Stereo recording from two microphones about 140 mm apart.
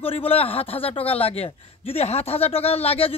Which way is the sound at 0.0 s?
40° left (ahead or behind).